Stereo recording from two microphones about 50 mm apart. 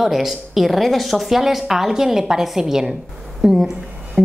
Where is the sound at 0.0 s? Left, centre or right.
Centre.